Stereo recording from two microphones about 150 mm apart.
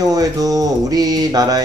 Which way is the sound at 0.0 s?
25° right (ahead or behind).